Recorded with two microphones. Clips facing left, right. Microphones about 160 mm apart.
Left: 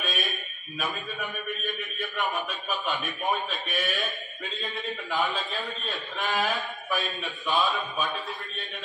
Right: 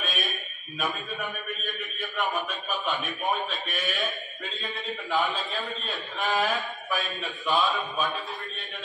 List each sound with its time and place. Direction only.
0.0 s a man's voice: centre (ahead or behind)